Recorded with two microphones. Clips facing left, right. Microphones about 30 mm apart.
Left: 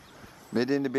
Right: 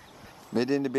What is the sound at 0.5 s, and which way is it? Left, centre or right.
Speech, centre.